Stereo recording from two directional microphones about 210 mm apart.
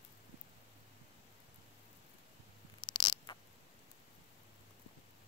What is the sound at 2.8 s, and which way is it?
Insect, 20° left (ahead or behind).